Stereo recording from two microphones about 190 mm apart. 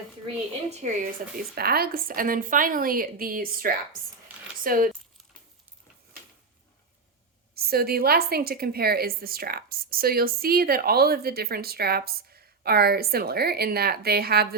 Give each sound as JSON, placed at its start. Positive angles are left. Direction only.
{"t": 0.7, "sound": "a woman's voice", "side_deg": -40}
{"t": 1.4, "sound": "a woman's voice", "side_deg": -55}
{"t": 7.5, "sound": "a woman's voice", "side_deg": -55}